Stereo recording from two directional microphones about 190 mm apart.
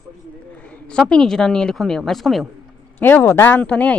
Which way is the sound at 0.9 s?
5° left (ahead or behind).